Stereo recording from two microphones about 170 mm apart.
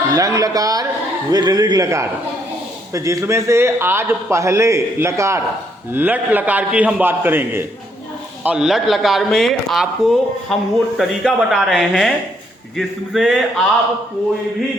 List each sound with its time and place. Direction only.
0.1 s a man's voice: 20° right (ahead or behind); by 13.3 s centre (ahead or behind)